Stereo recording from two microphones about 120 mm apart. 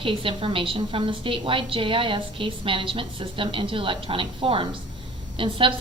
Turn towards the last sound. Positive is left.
turn(degrees=-45)  # may be behind; listen again after turning